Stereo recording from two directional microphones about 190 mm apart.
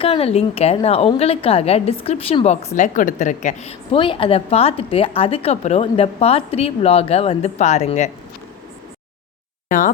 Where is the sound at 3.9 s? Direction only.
30° left (ahead or behind).